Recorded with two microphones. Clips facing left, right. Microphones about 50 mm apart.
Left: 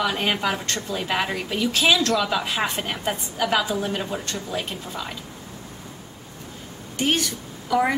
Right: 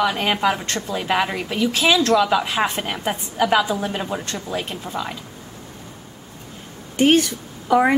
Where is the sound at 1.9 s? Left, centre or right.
Right.